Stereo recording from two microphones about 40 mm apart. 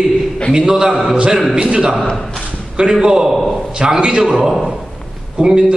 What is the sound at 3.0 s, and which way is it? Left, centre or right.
A man's voice, centre.